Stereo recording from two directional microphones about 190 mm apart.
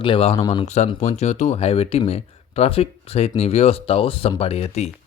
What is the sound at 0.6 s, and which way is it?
Speech, 35° left (ahead or behind).